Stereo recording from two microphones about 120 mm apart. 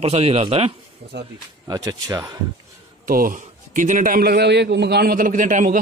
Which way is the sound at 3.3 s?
90° right.